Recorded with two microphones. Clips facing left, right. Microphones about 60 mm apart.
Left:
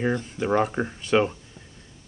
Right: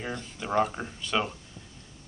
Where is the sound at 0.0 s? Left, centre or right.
Left.